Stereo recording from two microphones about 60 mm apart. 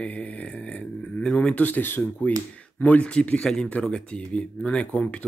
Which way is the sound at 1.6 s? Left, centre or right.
Left.